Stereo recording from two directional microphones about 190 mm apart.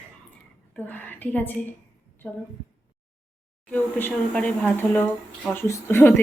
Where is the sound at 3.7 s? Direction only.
10° left (ahead or behind).